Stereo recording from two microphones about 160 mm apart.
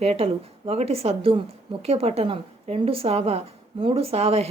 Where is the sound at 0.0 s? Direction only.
40° right (ahead or behind).